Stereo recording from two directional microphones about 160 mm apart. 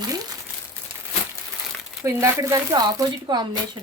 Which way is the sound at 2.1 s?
20° right (ahead or behind).